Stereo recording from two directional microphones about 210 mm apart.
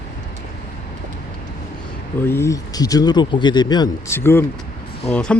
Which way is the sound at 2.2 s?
10° left (ahead or behind).